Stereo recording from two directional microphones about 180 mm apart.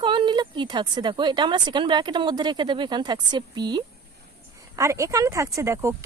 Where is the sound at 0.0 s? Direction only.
25° right (ahead or behind).